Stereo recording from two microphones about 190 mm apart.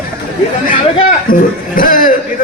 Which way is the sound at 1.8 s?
45° left (ahead or behind).